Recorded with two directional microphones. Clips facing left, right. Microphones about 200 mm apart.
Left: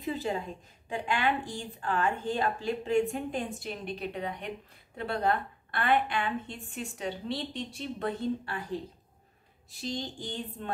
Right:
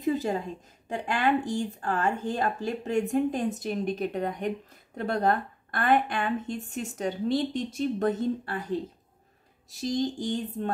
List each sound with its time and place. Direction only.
0.0 s a sound: 40° right (ahead or behind)
0.8 s a woman's voice: 40° right (ahead or behind)
9.7 s a woman's voice: 40° right (ahead or behind)